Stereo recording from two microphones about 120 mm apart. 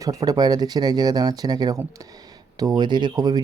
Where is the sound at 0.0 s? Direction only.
30° right (ahead or behind).